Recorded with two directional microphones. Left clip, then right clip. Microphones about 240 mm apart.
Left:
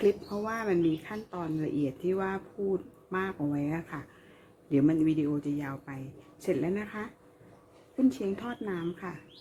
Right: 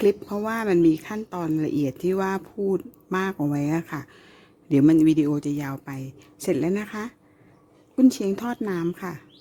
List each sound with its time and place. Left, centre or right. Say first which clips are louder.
0.0 s speech: right 6 dB; right